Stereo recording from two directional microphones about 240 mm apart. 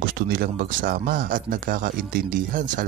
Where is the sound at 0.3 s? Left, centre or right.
Right.